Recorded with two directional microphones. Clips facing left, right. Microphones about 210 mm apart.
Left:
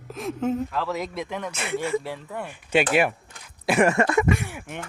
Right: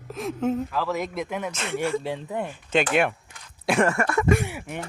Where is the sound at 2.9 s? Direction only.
5° left (ahead or behind).